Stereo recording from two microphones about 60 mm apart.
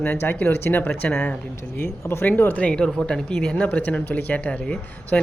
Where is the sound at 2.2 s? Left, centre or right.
Left.